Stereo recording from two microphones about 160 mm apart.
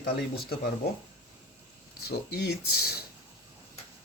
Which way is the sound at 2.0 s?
85° left.